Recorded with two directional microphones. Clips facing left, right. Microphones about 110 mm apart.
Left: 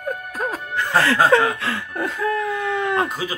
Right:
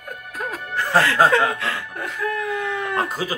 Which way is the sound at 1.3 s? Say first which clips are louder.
Left 2 dB; 30° left (ahead or behind).